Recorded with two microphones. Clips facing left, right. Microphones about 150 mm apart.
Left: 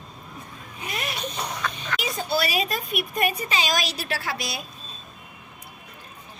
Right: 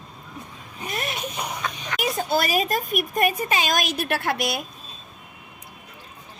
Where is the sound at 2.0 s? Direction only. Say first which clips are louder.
Right 3 dB; 50° right (ahead or behind).